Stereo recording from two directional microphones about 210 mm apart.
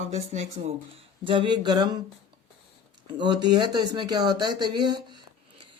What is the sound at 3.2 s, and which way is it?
Speech, 20° right (ahead or behind).